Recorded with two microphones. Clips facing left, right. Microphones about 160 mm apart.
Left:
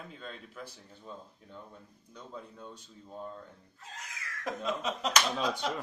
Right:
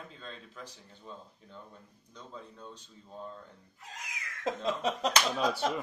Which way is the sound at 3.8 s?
15° right (ahead or behind).